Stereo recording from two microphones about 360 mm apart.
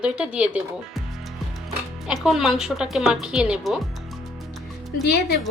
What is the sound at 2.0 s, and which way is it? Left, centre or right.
Speech, centre.